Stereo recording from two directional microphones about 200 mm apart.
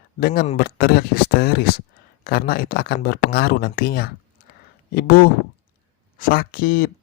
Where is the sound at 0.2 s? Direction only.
50° left (ahead or behind).